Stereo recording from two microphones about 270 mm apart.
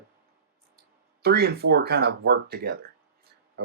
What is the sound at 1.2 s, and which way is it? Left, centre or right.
Speech, right.